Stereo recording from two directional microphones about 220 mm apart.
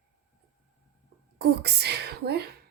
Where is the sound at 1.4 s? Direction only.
45° right (ahead or behind).